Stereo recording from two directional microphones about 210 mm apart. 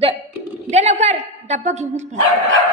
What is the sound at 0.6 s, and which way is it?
A woman's voice, 30° right (ahead or behind).